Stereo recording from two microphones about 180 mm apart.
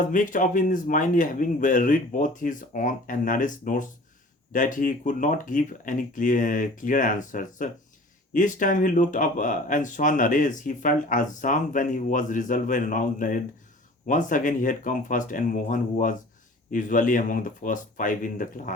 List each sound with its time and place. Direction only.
0.0 s speech: 45° left (ahead or behind)